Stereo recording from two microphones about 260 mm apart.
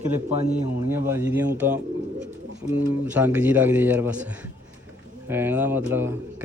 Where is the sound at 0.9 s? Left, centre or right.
Centre.